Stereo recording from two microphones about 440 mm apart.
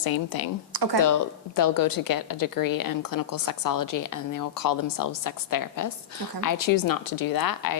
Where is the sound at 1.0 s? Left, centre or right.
Left.